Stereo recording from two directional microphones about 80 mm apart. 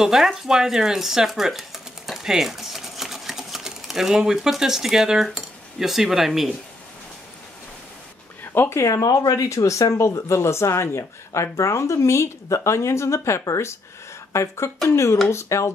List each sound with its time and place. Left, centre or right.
0.0 s speech: centre
8.5 s speech: left
8.8 s speech: left